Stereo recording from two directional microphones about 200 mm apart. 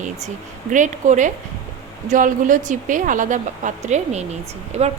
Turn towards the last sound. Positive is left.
turn(degrees=-35)  # may be behind; listen again after turning